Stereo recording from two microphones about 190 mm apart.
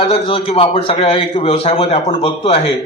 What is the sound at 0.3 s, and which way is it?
A man's voice, 30° left (ahead or behind).